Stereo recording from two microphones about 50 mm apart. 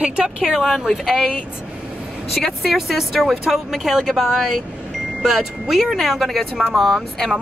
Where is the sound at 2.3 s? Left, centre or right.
Centre.